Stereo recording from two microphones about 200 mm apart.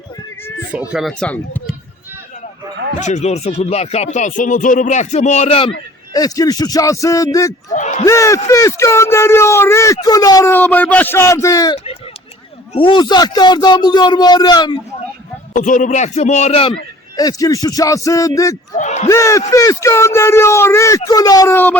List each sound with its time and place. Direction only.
0.7 s speech: 5° right (ahead or behind)
3.0 s speech: 35° left (ahead or behind)
6.1 s speech: 20° left (ahead or behind)
7.7 s crowd: 35° left (ahead or behind)
8.0 s a man's voice: 15° left (ahead or behind)
15.5 s speech: 40° left (ahead or behind)
17.2 s speech: 20° left (ahead or behind)
18.8 s a sound: 35° left (ahead or behind)
19.0 s speech: 15° left (ahead or behind)